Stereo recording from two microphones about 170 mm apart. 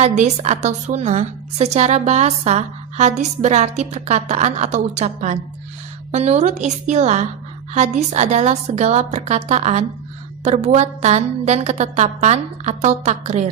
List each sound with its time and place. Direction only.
0.0 s a woman's voice: 40° right (ahead or behind)